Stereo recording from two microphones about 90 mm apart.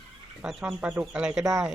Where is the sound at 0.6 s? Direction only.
15° right (ahead or behind).